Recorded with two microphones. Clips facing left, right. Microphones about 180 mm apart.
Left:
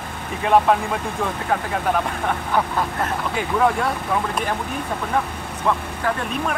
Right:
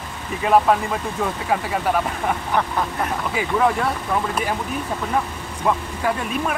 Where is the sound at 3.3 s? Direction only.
Centre (ahead or behind).